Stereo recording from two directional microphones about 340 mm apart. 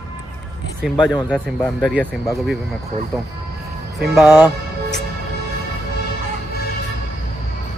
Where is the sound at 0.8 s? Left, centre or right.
Centre.